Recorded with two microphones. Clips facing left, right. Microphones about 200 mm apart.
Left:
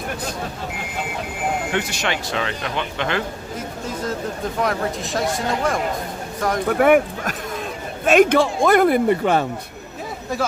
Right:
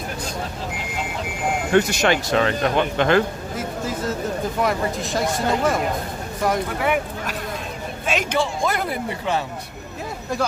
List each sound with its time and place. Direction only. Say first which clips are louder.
1.7 s speech: right 6 dB; 45° right (ahead or behind)
4.6 s speech: left 1 dB; centre (ahead or behind)
6.7 s speech: left 8 dB; 50° left (ahead or behind)